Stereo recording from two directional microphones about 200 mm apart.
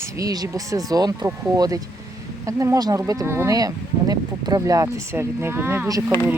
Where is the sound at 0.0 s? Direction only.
20° right (ahead or behind).